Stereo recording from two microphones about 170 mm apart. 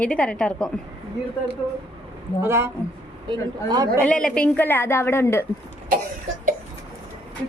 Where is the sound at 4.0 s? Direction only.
5° left (ahead or behind).